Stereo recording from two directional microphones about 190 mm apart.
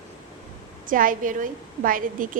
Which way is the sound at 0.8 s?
45° right (ahead or behind).